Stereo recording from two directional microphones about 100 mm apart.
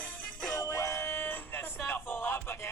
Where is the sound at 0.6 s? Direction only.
30° left (ahead or behind).